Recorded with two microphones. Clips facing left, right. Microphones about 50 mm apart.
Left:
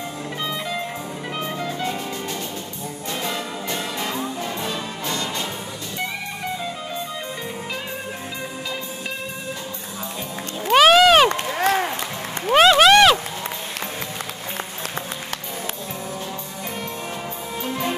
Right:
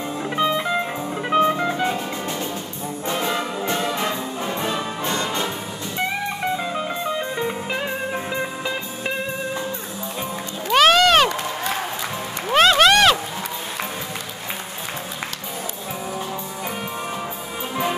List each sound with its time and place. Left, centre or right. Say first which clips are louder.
0.4 s music: right 7 dB; right
3.1 s brass instrument: right 4 dB; right
4.5 s music: right 3 dB; right
7.3 s music: right 5 dB; right
10.7 s a sound: left 2 dB; centre
11.2 s run: left 4 dB; left
12.5 s a sound: left 2 dB; centre